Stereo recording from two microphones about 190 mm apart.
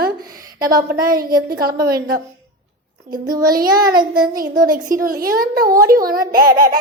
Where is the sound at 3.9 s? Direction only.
25° right (ahead or behind).